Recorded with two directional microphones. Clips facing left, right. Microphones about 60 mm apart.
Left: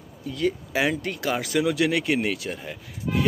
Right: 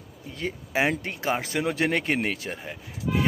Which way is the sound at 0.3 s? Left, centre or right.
Right.